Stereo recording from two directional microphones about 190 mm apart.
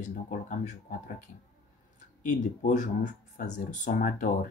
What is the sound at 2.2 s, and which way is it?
Speech, 40° left (ahead or behind).